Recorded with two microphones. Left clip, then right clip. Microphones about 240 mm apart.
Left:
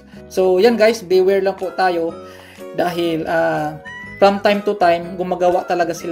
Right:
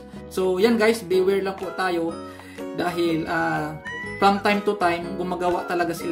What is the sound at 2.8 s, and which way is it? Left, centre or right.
Speech, centre.